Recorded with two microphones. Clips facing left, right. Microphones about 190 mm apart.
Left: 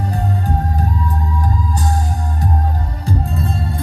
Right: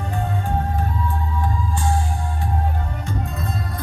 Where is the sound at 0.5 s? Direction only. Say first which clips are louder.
Left 2 dB; 40° left (ahead or behind).